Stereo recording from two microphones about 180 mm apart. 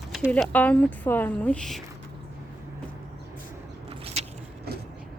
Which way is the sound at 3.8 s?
35° right (ahead or behind).